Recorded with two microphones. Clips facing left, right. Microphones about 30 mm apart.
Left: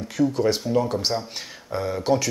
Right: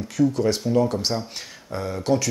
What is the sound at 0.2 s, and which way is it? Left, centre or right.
Speech, centre.